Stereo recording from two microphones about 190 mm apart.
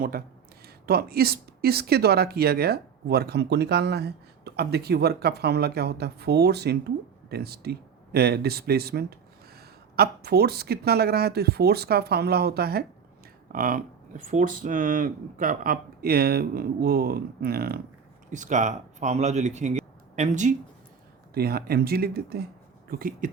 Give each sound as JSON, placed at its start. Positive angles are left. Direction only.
{"t": 0.0, "sound": "speech", "side_deg": -50}
{"t": 18.3, "sound": "speech", "side_deg": -40}
{"t": 21.3, "sound": "speech", "side_deg": -55}